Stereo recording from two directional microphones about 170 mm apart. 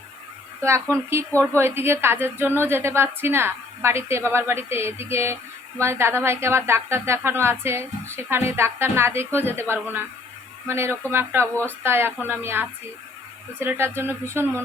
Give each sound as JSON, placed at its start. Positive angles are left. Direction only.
{"t": 0.6, "sound": "a woman's voice", "side_deg": -15}